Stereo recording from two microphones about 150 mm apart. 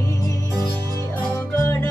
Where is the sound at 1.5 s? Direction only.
20° left (ahead or behind).